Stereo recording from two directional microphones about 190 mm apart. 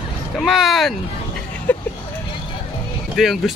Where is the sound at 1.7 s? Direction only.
10° left (ahead or behind).